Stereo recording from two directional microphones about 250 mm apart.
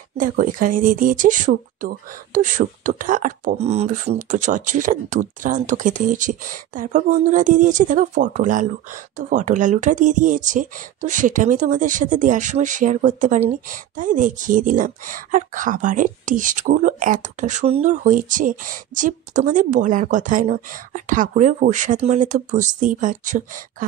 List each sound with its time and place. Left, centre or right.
0.2 s speech: right